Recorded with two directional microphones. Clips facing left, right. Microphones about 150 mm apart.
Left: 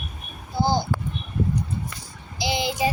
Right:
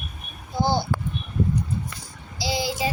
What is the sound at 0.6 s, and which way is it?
Speech, 15° left (ahead or behind).